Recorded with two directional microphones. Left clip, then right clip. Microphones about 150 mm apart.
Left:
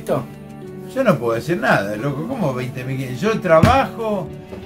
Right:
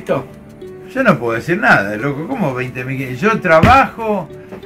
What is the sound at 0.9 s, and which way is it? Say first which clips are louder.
A man's voice: right 3 dB; 10° left (ahead or behind).